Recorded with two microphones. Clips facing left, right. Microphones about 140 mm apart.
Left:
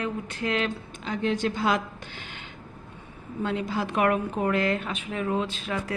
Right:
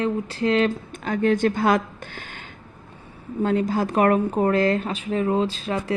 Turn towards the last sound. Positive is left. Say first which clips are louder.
# right 5 dB
turn(degrees=-35)  # may be behind; listen again after turning